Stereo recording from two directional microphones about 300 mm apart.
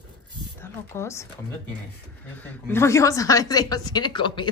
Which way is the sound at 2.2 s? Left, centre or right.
Centre.